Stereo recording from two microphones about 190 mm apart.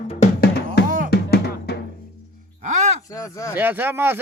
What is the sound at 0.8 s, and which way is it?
Music, 45° right (ahead or behind).